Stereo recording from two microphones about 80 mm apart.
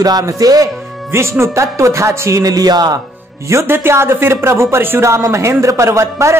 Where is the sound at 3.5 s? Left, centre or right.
Right.